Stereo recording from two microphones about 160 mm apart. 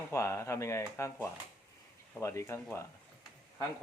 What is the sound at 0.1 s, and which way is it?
Speech, 15° left (ahead or behind).